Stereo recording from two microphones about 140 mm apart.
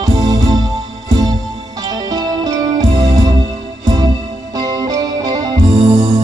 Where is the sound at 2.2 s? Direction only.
30° right (ahead or behind).